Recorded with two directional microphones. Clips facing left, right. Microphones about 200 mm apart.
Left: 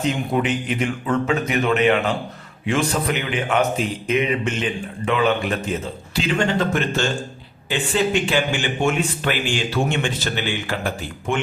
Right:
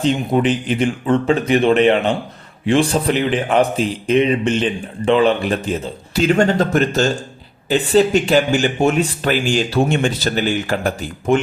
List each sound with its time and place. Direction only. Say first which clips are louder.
0.0 s speech: right 5 dB; 30° right (ahead or behind)
6.2 s speech: right 6 dB; 45° right (ahead or behind)